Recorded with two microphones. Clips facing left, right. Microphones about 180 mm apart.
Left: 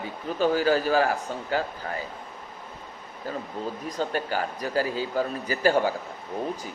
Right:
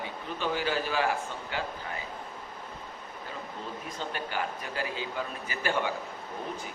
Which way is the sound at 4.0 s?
40° left (ahead or behind).